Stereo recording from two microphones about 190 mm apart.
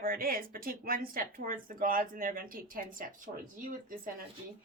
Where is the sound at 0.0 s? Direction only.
50° right (ahead or behind).